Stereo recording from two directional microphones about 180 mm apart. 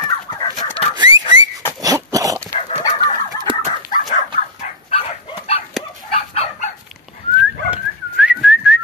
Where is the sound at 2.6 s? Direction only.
35° left (ahead or behind).